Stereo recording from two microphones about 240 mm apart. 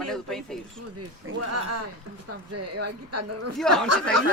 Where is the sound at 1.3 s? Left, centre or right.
Right.